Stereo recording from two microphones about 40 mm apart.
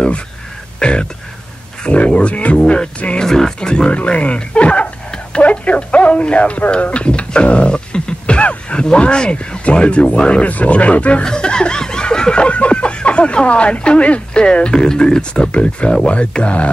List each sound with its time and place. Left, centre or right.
0.7 s a sound: left
1.8 s speech: left
3.2 s speech: centre
3.5 s speech: left
6.7 s beatboxing: left
8.8 s speech: left
11.2 s snicker: left
15.5 s speech: left